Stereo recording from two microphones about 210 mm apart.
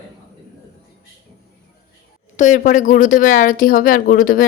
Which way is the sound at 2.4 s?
35° left (ahead or behind).